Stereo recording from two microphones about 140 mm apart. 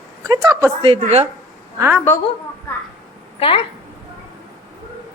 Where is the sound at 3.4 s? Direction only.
40° left (ahead or behind).